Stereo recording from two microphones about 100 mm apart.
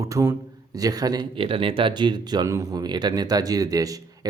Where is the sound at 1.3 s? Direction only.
60° right (ahead or behind).